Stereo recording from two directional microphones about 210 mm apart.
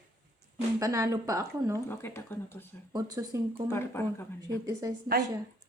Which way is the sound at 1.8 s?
10° left (ahead or behind).